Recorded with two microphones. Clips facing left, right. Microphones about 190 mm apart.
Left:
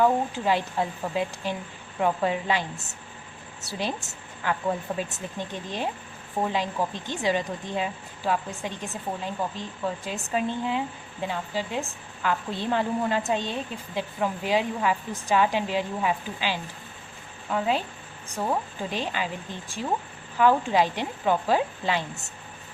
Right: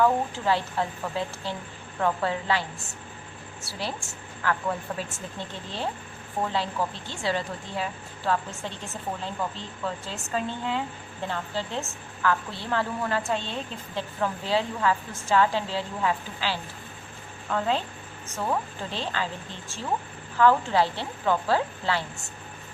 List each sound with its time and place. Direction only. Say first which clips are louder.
0.0 s a woman's voice: left 1 dB; 15° left (ahead or behind)
3.7 s a woman's voice: left 3 dB; 20° left (ahead or behind)